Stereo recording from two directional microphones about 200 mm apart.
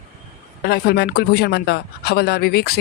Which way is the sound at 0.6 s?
50° left (ahead or behind).